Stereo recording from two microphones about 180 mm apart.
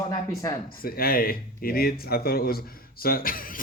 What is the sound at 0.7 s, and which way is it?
Speech, 55° left (ahead or behind).